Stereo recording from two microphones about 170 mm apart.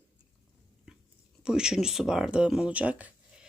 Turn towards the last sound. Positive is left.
turn(degrees=-10)  # may be behind; listen again after turning